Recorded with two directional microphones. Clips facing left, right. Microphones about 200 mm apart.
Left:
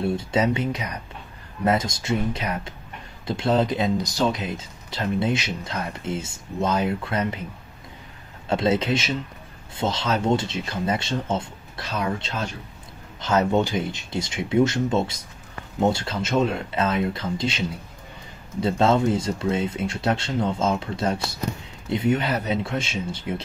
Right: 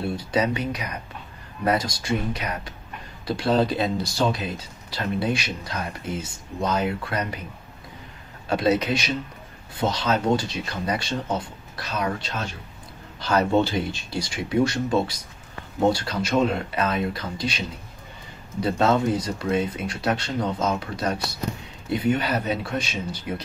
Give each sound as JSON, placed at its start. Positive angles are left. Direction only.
{"t": 0.1, "sound": "speech", "side_deg": 25}
{"t": 8.5, "sound": "speech", "side_deg": 25}